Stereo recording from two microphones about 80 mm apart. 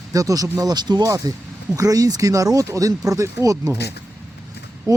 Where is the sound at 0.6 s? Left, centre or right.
Right.